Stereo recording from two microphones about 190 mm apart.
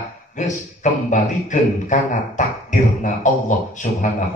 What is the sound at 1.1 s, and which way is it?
Speech, 40° left (ahead or behind).